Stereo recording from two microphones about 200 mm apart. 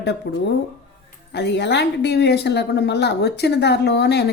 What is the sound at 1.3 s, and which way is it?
Speech, 60° left (ahead or behind).